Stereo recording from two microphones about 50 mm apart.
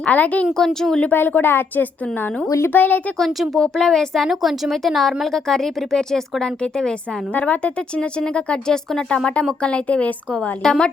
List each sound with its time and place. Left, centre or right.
0.0 s speech: left
0.5 s speech: centre
1.0 s a woman's voice: left
3.6 s speech: centre
4.3 s speech: centre
7.3 s speech: left
8.2 s speech: centre
10.6 s speech: centre